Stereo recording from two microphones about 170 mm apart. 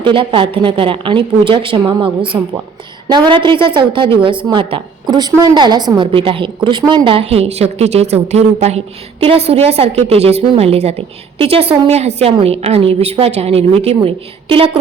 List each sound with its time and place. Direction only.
0.0 s a woman's voice: 30° right (ahead or behind)